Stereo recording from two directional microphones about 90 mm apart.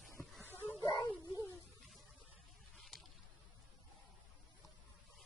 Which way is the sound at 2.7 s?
Centre (ahead or behind).